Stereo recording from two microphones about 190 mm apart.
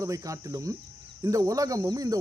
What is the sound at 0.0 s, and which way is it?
Speech, 15° right (ahead or behind).